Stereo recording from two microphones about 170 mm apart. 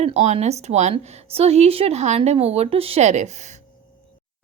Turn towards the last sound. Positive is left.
turn(degrees=-40)  # may be behind; listen again after turning